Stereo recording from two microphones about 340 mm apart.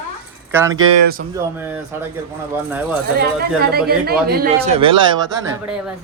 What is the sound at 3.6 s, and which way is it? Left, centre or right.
Speech, right.